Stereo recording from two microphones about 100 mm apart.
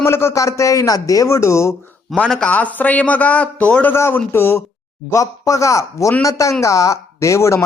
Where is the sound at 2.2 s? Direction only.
10° left (ahead or behind); by 7.6 s 30° left (ahead or behind).